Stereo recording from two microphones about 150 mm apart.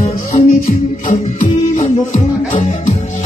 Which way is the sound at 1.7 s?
55° left (ahead or behind).